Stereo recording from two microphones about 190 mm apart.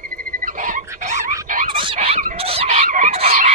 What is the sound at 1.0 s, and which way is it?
Frog, 40° right (ahead or behind).